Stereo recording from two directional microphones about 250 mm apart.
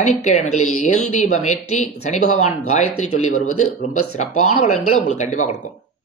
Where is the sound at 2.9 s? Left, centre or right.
Left.